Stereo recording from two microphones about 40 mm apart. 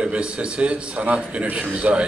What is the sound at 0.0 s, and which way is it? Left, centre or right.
A man's voice, right.